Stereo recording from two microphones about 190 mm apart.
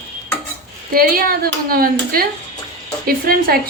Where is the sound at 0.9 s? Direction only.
50° right (ahead or behind).